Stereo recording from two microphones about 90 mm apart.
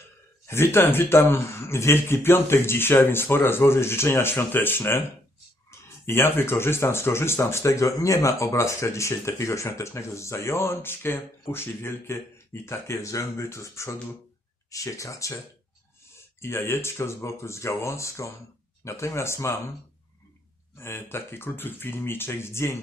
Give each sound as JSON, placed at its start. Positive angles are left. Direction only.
{"t": 0.4, "sound": "speech", "side_deg": 30}
{"t": 6.1, "sound": "speech", "side_deg": 25}
{"t": 16.4, "sound": "speech", "side_deg": 30}
{"t": 20.7, "sound": "speech", "side_deg": 30}